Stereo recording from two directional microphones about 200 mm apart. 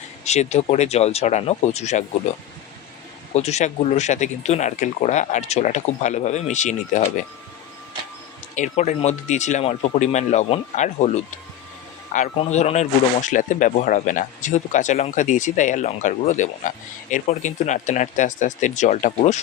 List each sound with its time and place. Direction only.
0.3 s speech: 35° left (ahead or behind)
3.3 s speech: 35° left (ahead or behind)
8.5 s speech: 35° left (ahead or behind)